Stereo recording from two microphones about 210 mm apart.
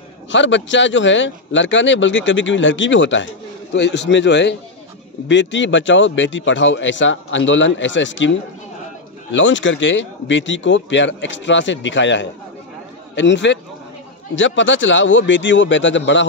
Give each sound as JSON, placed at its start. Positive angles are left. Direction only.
{"t": 0.3, "sound": "speech", "side_deg": 60}